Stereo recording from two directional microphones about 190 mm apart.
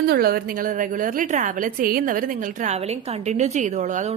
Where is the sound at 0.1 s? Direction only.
50° right (ahead or behind).